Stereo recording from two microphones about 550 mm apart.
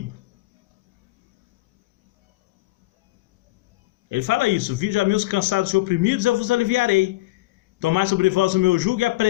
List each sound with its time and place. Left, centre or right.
4.1 s speech: right